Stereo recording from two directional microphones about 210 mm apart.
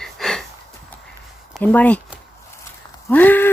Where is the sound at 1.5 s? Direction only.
5° left (ahead or behind).